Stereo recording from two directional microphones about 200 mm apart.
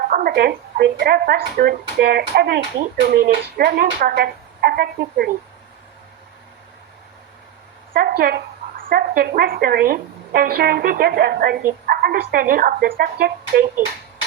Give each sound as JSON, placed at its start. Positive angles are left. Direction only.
{"t": 0.1, "sound": "speech", "side_deg": -50}
{"t": 7.9, "sound": "speech", "side_deg": -50}